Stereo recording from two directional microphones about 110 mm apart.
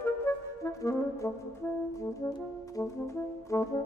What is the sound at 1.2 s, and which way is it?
Brass instrument, 30° left (ahead or behind).